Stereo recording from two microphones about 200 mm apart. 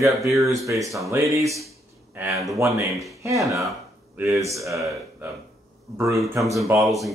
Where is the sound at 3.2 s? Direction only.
15° right (ahead or behind).